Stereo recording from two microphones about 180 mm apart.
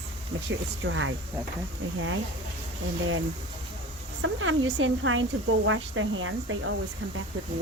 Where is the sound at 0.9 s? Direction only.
90° right.